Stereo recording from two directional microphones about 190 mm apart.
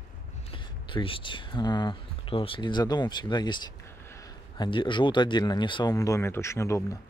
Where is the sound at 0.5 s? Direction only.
25° left (ahead or behind).